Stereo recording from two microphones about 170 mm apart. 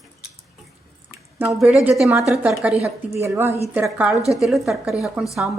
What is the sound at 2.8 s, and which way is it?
A woman's voice, 15° right (ahead or behind).